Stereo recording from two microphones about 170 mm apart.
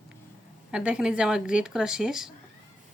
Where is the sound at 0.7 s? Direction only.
5° right (ahead or behind).